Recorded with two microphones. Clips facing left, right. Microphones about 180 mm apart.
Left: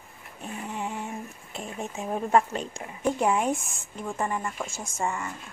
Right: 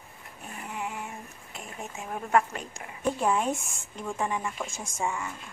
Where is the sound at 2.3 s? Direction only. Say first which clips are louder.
Left 1 dB; 25° left (ahead or behind).